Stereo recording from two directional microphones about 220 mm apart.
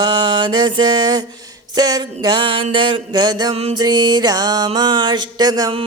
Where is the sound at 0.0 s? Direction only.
20° right (ahead or behind).